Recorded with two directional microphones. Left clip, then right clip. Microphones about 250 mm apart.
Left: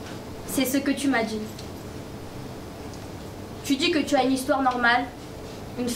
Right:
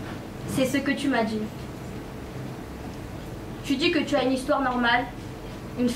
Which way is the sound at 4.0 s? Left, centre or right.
Left.